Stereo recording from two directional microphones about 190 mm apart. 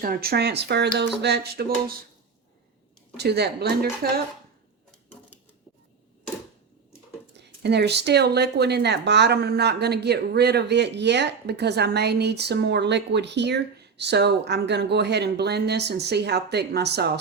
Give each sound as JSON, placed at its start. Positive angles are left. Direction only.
{"t": 0.0, "sound": "speech", "side_deg": -50}
{"t": 3.2, "sound": "speech", "side_deg": -60}
{"t": 7.6, "sound": "speech", "side_deg": -60}